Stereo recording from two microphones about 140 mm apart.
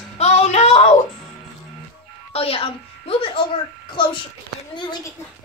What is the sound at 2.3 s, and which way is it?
A woman's voice, 45° left (ahead or behind).